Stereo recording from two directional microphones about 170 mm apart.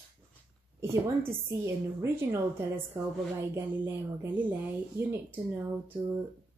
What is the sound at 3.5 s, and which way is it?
Speech, 15° right (ahead or behind).